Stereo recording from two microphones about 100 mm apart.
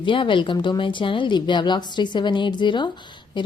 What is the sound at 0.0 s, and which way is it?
A woman's voice, 55° left (ahead or behind).